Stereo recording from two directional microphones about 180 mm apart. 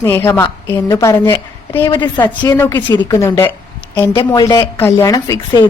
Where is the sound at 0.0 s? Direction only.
15° left (ahead or behind).